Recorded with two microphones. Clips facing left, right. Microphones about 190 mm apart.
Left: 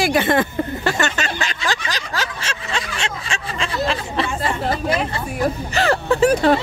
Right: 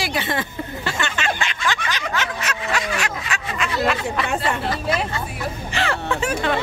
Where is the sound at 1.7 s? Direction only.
35° left (ahead or behind).